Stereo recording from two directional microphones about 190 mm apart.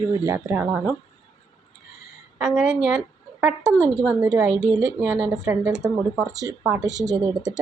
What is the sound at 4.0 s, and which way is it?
Speech, 5° right (ahead or behind).